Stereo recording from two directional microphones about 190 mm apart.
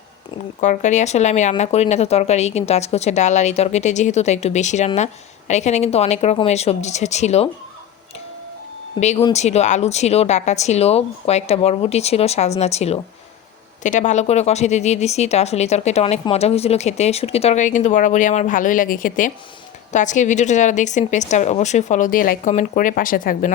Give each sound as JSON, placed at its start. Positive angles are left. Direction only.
{"t": 0.6, "sound": "speech", "side_deg": 40}
{"t": 9.0, "sound": "speech", "side_deg": 35}